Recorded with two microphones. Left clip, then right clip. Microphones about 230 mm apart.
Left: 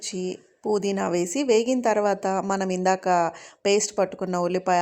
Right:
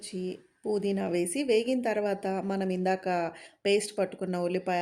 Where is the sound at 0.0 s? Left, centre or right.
Centre.